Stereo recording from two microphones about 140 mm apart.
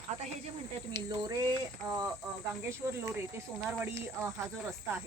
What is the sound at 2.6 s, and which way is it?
Speech, 20° right (ahead or behind).